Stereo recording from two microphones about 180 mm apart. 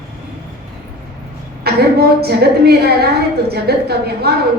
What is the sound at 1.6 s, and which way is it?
A woman's voice, 60° right (ahead or behind).